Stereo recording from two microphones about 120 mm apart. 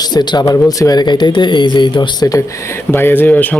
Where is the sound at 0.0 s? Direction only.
35° left (ahead or behind).